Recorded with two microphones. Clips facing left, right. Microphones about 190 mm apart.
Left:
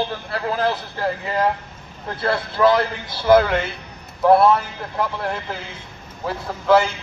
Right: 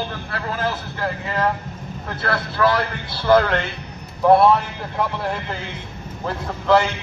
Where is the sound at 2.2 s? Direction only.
25° left (ahead or behind).